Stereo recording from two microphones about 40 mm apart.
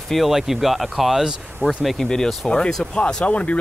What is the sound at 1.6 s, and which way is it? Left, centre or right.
Speech, right.